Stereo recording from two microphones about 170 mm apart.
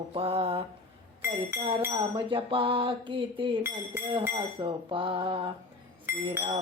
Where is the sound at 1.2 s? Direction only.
15° right (ahead or behind).